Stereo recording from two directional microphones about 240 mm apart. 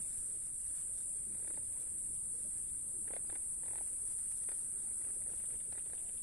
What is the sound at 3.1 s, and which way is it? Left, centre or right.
Wild animals, right.